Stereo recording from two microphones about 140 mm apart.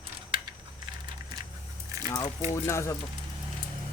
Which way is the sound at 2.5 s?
20° left (ahead or behind).